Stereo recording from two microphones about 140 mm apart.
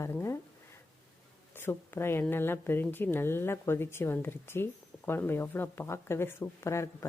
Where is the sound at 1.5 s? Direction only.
15° left (ahead or behind).